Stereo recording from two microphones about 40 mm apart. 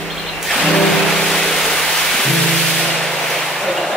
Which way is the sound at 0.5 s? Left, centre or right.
Centre.